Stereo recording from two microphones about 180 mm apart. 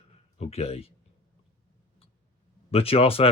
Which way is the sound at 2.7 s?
30° left (ahead or behind).